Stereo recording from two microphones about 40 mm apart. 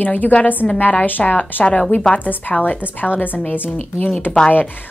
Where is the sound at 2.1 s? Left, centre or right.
Left.